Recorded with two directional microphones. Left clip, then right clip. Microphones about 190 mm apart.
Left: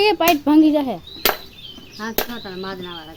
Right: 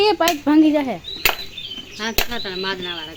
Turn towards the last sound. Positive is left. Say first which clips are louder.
# right 5 dB
turn(degrees=15)  # may be behind; listen again after turning